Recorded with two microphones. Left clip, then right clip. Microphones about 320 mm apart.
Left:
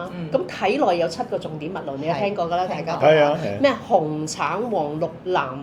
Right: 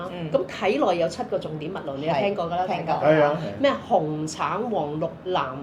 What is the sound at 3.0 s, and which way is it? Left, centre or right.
Speech, left.